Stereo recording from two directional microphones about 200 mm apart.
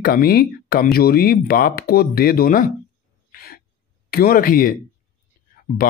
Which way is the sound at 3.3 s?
50° left (ahead or behind).